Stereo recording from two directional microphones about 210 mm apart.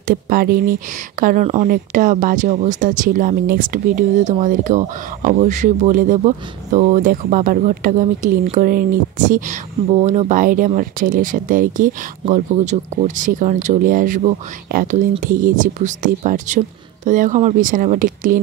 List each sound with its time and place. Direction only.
0.1 s speech: 45° right (ahead or behind)